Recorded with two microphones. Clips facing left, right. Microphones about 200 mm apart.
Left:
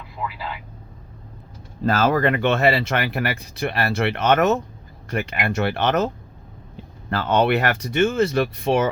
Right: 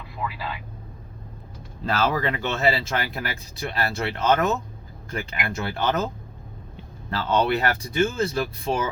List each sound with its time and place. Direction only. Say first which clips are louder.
1.8 s speech: left 5 dB; 50° left (ahead or behind); by 6.1 s 70° left (ahead or behind)
7.1 s speech: left 3 dB; 55° left (ahead or behind)